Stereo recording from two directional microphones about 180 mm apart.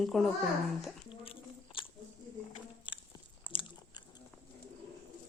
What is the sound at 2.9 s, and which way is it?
Chewing, 25° left (ahead or behind).